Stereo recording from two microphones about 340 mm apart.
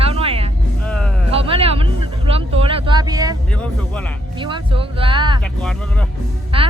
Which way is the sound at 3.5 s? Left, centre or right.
Centre.